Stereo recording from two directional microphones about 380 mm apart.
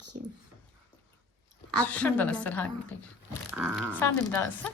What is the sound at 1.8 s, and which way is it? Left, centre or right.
Speech, centre.